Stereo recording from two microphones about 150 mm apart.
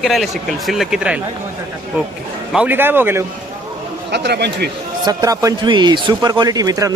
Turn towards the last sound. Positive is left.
turn(degrees=-25)  # may be behind; listen again after turning